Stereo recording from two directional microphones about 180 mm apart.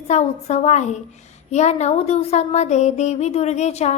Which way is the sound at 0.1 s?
40° left (ahead or behind).